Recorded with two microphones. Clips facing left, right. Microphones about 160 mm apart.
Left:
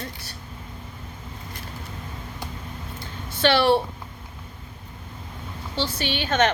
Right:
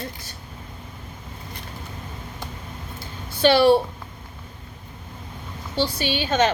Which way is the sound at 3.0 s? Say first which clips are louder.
Right 3 dB; 15° right (ahead or behind).